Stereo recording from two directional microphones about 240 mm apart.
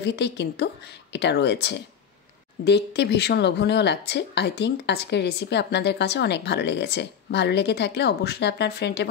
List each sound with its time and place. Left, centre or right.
0.0 s speech: left